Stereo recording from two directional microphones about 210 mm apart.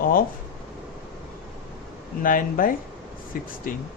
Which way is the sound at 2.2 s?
40° left (ahead or behind).